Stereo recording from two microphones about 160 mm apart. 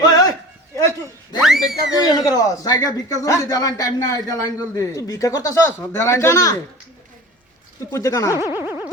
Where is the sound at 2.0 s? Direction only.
20° left (ahead or behind).